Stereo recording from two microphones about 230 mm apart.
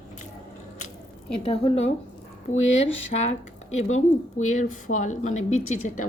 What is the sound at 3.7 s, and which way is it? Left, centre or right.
Speech, left.